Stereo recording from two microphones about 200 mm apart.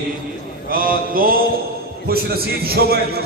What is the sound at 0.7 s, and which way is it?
A man's voice, 45° right (ahead or behind).